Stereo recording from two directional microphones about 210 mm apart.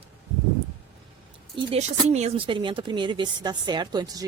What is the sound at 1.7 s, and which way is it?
Speech, 30° right (ahead or behind).